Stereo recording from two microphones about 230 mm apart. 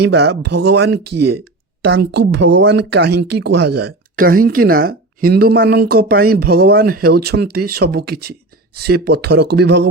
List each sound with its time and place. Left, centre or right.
0.0 s speech: right